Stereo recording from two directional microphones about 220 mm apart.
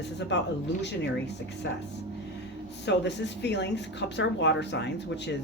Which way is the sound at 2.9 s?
50° left (ahead or behind).